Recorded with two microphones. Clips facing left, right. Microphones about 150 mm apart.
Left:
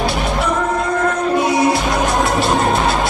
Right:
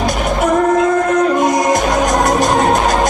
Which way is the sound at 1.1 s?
45° right (ahead or behind).